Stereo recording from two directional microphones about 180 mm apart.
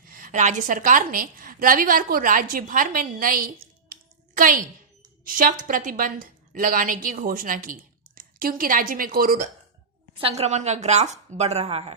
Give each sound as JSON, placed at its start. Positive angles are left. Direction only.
{"t": 0.0, "sound": "a woman's voice", "side_deg": -50}
{"t": 10.2, "sound": "speech", "side_deg": -35}